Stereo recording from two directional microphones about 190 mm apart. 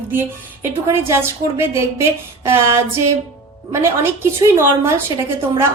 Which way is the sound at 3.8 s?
15° right (ahead or behind).